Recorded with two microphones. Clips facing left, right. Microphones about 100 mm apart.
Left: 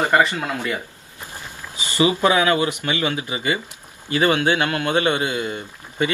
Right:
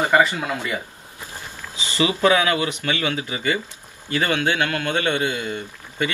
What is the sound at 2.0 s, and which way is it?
A man's voice, 15° left (ahead or behind).